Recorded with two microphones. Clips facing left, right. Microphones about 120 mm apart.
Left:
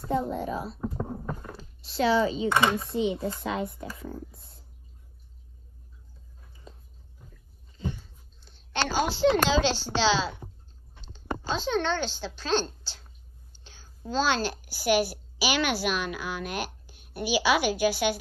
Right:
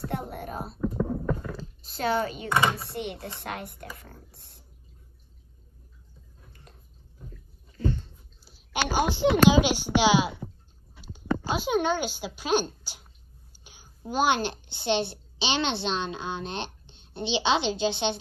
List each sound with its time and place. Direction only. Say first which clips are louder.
0.3 s speech: left 5 dB; 55° right (ahead or behind)
0.7 s a sound: right 5 dB; 25° left (ahead or behind)
1.6 s speech: left 4 dB; 45° right (ahead or behind)
2.8 s speech: left 7 dB; 65° right (ahead or behind)
4.3 s speech: left 2 dB; 85° right
7.7 s a sound: right 6 dB; 15° left (ahead or behind)
8.4 s a sound: even; 5° right (ahead or behind)
9.5 s speech: right 4 dB; 15° right (ahead or behind)
11.4 s a woman's voice: right 1 dB; 10° right (ahead or behind)